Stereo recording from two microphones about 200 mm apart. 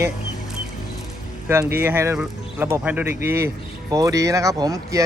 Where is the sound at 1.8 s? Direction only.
10° right (ahead or behind).